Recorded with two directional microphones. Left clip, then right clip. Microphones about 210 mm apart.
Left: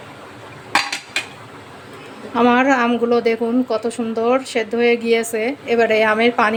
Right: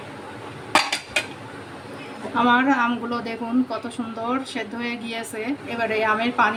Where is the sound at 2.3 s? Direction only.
40° left (ahead or behind).